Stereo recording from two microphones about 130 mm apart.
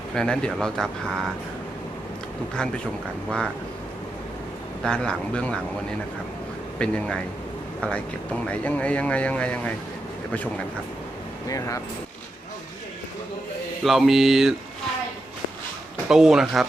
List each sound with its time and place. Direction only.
0.1 s speech: 5° left (ahead or behind)
3.2 s speech: 5° left (ahead or behind)
4.8 s speech: 5° left (ahead or behind)
6.7 s speech: 10° left (ahead or behind)
11.4 s speech: 25° left (ahead or behind)
13.8 s speech: centre (ahead or behind)
16.0 s speech: 5° right (ahead or behind)